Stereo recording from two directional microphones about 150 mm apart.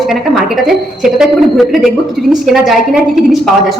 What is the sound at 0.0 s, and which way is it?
Speech, centre (ahead or behind).